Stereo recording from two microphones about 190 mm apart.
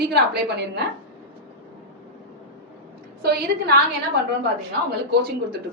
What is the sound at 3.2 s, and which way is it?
Speech, 55° right (ahead or behind).